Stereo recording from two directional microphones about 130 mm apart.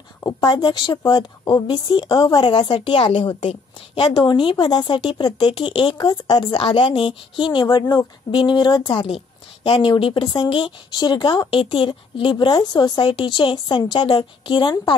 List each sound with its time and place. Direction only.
0.2 s a woman's voice: 30° left (ahead or behind)
9.0 s a woman's voice: 50° left (ahead or behind)